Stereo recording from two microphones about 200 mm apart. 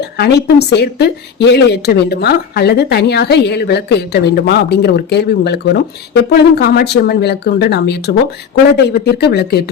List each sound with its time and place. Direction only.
0.0 s a woman's voice: 55° left (ahead or behind)